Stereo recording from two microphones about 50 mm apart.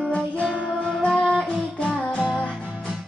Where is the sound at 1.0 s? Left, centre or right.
Centre.